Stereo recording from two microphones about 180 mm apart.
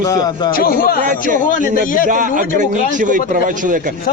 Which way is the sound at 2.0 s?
50° right (ahead or behind).